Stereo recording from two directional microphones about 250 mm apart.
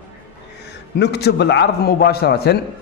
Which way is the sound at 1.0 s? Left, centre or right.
Left.